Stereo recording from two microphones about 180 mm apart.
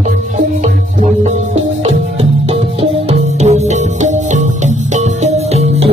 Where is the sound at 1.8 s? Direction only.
35° right (ahead or behind).